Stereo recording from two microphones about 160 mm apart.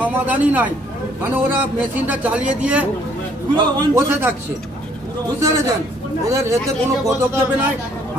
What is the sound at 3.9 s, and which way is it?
Speech, 15° right (ahead or behind).